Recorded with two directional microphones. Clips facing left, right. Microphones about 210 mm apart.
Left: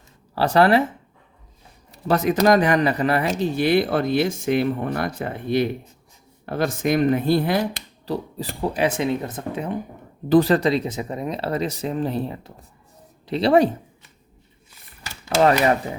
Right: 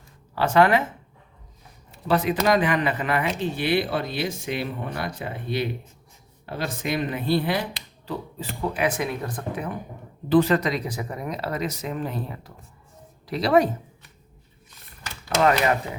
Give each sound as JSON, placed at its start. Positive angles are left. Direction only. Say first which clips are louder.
{"t": 0.3, "sound": "speech", "louder": "left 2 dB", "side_deg": 35}
{"t": 1.9, "sound": "speech", "louder": "left 2 dB", "side_deg": 45}
{"t": 10.2, "sound": "speech", "louder": "left 3 dB", "side_deg": 40}